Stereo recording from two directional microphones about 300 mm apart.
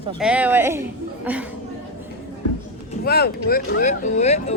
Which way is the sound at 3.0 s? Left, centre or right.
Left.